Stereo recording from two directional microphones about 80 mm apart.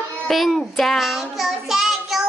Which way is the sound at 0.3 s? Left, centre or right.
Centre.